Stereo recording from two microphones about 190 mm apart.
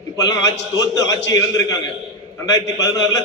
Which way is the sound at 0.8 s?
20° left (ahead or behind).